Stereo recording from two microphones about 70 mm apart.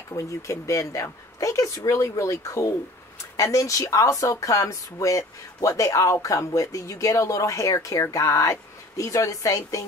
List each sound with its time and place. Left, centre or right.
0.1 s speech: left